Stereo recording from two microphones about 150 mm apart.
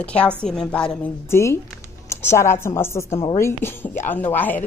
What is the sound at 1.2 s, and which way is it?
Speech, 20° left (ahead or behind).